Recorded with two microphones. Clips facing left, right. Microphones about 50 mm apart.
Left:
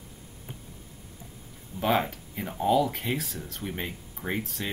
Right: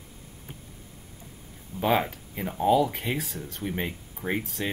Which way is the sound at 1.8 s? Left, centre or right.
Centre.